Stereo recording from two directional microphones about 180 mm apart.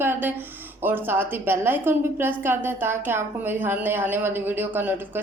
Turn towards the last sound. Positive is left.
turn(degrees=-10)  # may be behind; listen again after turning